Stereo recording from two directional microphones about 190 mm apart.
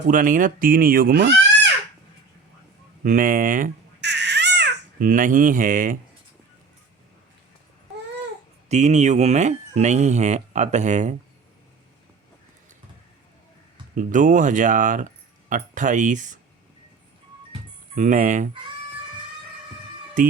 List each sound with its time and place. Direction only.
0.1 s speech: 45° right (ahead or behind)
3.0 s speech: 45° right (ahead or behind)
4.0 s baby cry: 65° right (ahead or behind)
4.9 s speech: 45° right (ahead or behind)
8.7 s speech: 35° right (ahead or behind)
13.9 s speech: 45° right (ahead or behind)
17.9 s speech: 40° right (ahead or behind)
20.2 s speech: 45° right (ahead or behind)